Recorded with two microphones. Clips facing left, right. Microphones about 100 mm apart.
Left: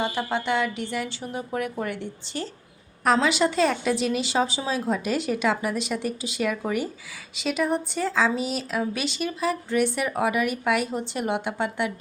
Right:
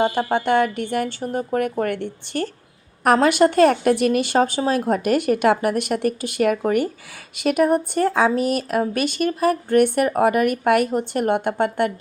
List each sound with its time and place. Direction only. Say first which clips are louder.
0.0 s a woman's voice: right 7 dB; 50° right (ahead or behind)